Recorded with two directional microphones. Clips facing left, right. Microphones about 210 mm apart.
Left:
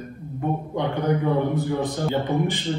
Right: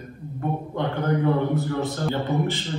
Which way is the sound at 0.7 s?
15° left (ahead or behind).